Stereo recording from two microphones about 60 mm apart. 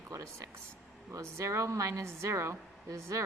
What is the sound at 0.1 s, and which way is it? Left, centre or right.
A woman's voice, right.